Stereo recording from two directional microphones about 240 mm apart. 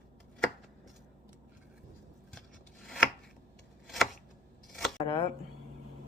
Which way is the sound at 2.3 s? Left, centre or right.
Centre.